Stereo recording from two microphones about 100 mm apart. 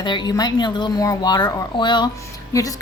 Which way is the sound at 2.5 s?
35° left (ahead or behind).